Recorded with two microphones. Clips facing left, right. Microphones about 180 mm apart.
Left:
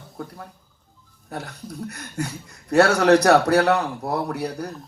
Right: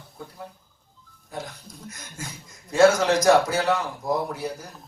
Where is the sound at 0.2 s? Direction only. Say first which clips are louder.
Left 4 dB; 60° left (ahead or behind).